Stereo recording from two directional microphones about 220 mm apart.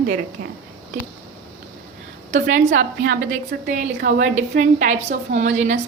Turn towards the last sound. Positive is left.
turn(degrees=-35)  # may be behind; listen again after turning